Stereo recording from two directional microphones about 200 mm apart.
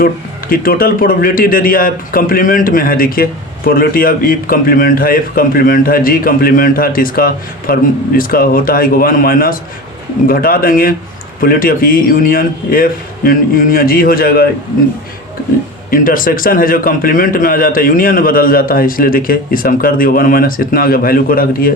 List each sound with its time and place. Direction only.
0.0 s a man's voice: 45° left (ahead or behind)
15.9 s a man's voice: 45° left (ahead or behind)